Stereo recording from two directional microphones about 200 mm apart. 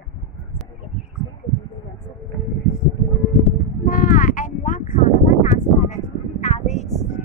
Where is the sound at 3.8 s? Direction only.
45° left (ahead or behind).